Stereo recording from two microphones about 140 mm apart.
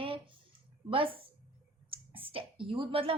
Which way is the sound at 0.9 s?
40° right (ahead or behind).